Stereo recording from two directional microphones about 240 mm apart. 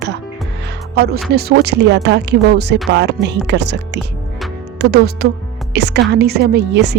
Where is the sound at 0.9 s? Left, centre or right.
Right.